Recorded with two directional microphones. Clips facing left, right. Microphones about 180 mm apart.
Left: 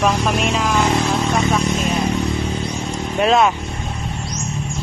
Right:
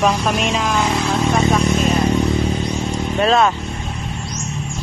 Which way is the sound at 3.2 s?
10° left (ahead or behind).